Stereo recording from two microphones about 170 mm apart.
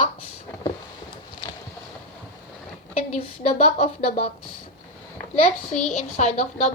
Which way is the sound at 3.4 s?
35° left (ahead or behind).